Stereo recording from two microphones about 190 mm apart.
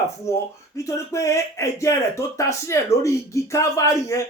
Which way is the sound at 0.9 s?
15° left (ahead or behind).